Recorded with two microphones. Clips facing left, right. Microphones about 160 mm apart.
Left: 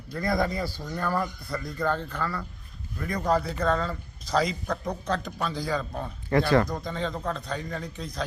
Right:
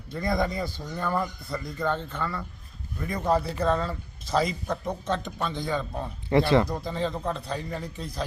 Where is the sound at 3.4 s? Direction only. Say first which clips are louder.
Right 1 dB; 30° right (ahead or behind).